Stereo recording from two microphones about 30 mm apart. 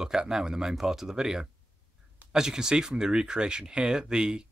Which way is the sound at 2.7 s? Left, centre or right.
Right.